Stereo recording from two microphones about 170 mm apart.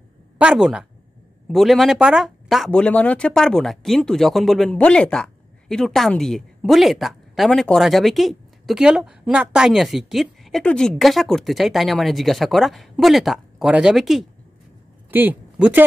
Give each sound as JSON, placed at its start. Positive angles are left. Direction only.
{"t": 0.4, "sound": "speech", "side_deg": -5}